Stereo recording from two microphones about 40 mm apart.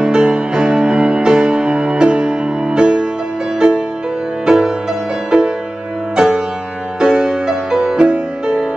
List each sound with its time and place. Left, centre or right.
0.0 s music: right
6.1 s music: centre